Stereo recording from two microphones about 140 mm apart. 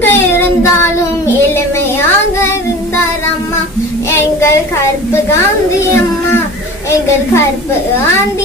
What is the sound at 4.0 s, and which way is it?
Child singing, 20° left (ahead or behind).